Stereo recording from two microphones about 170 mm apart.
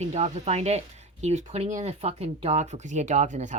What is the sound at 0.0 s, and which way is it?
Speech, 40° right (ahead or behind).